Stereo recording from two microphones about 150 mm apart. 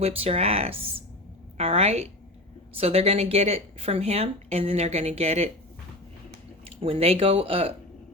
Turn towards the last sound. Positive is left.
turn(degrees=-40)  # may be behind; listen again after turning